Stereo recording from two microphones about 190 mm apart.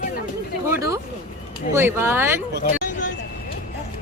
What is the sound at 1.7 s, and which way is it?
Speech, 15° right (ahead or behind).